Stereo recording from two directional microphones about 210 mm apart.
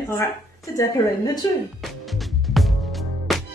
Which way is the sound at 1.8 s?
Centre (ahead or behind).